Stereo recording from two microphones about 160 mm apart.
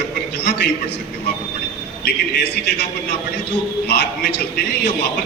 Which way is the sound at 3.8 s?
90° left.